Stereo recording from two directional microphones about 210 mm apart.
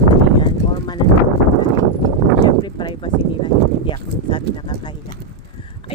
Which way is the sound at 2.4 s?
20° left (ahead or behind).